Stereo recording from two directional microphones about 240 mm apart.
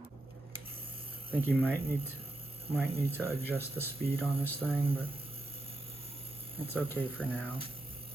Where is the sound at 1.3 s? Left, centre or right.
Centre.